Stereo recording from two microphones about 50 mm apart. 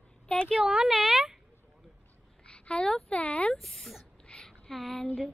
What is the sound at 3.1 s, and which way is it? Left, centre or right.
Speech, left.